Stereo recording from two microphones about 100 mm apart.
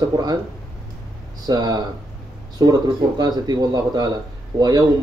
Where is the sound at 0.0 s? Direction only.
45° right (ahead or behind).